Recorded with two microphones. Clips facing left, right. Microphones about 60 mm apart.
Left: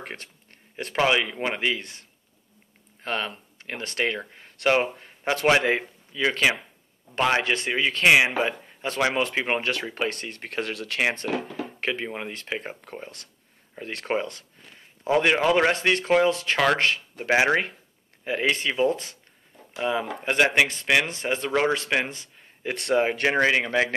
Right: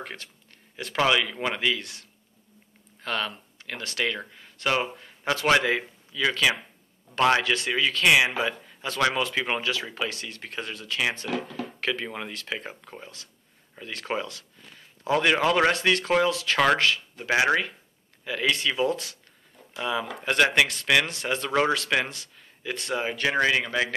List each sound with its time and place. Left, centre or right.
0.0 s speech: left
0.9 s a man's voice: left
9.6 s speech: left
10.5 s speech: left
11.0 s speech: left
11.5 s speech: left
14.1 s a sound: left
15.0 s a man's voice: centre
15.7 s speech: left
22.6 s speech: left
23.2 s speech: left